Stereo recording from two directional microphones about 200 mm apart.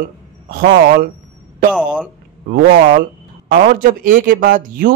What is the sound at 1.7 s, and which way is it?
Speech, 5° right (ahead or behind).